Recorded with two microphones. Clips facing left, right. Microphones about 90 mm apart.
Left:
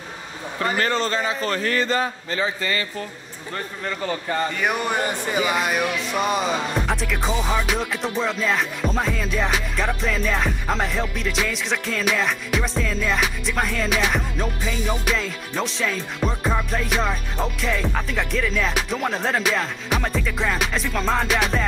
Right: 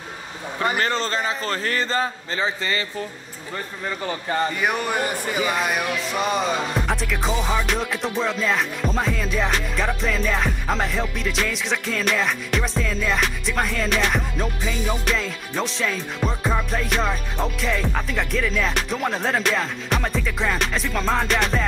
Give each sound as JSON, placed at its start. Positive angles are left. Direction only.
{"t": 0.6, "sound": "a man's voice", "side_deg": -25}
{"t": 5.4, "sound": "music", "side_deg": 0}